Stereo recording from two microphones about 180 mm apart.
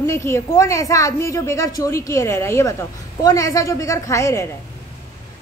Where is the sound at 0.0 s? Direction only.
15° left (ahead or behind).